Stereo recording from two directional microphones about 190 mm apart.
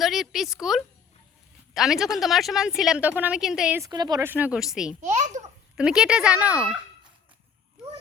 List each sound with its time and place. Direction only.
0.0 s a woman's voice: centre (ahead or behind)
3.8 s a woman's voice: 20° right (ahead or behind); by 4.9 s 5° right (ahead or behind)
5.0 s a child's voice: 40° right (ahead or behind)
5.7 s a woman's voice: 5° right (ahead or behind)